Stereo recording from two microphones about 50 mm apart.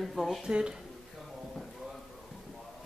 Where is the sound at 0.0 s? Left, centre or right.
Centre.